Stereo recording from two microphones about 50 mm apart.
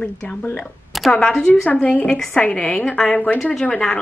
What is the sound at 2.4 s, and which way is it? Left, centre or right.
A woman's voice, left.